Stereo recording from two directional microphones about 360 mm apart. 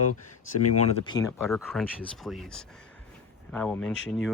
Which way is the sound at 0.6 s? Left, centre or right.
Left.